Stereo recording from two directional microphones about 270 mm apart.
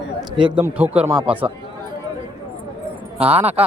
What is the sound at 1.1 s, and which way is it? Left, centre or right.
Speech, centre.